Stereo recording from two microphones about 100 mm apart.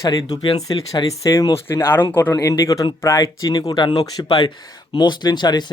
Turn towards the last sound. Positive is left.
turn(degrees=45)  # may be behind; listen again after turning